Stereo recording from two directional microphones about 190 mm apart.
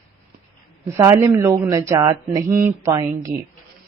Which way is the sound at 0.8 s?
15° right (ahead or behind).